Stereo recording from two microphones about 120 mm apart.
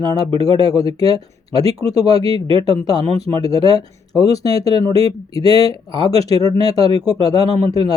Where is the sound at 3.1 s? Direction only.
30° left (ahead or behind).